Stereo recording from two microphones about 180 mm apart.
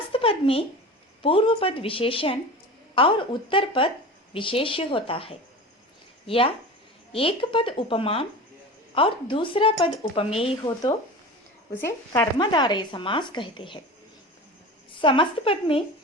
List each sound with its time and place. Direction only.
0.1 s a sound: 30° left (ahead or behind)
1.2 s a woman's voice: 30° left (ahead or behind)
11.8 s speech: 15° left (ahead or behind)
12.4 s a woman's voice: 25° left (ahead or behind)
15.0 s a woman's voice: 30° left (ahead or behind)